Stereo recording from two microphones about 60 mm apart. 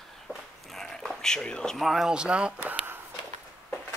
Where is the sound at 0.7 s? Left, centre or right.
Centre.